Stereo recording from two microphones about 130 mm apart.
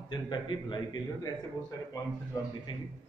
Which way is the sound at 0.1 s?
35° left (ahead or behind).